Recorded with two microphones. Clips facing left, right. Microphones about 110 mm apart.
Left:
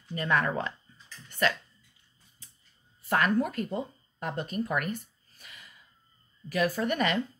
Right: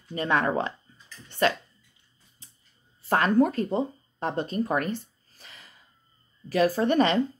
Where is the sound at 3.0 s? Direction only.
30° right (ahead or behind).